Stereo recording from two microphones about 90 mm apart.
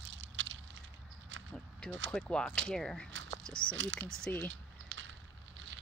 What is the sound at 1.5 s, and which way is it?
Speech, 10° left (ahead or behind).